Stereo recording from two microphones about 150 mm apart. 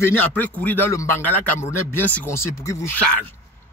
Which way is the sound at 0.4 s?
10° left (ahead or behind).